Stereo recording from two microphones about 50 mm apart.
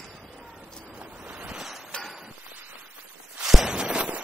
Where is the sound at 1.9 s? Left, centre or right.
Centre.